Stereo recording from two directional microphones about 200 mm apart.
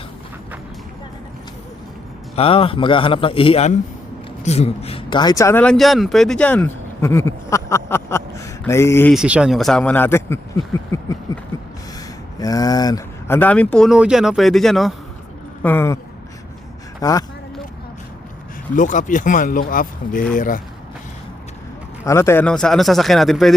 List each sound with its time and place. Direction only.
2.3 s a man's voice: 30° left (ahead or behind); by 9.1 s 10° left (ahead or behind)
9.1 s speech: 5° right (ahead or behind); by 11.1 s 15° left (ahead or behind)
12.4 s speech: 20° left (ahead or behind)
17.0 s speech: 15° left (ahead or behind)
18.8 s speech: 40° left (ahead or behind)
22.0 s speech: 15° left (ahead or behind)